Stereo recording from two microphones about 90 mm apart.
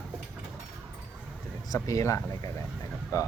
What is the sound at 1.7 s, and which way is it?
Speech, 35° left (ahead or behind).